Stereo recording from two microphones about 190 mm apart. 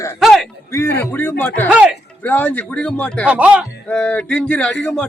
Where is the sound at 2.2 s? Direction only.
10° left (ahead or behind).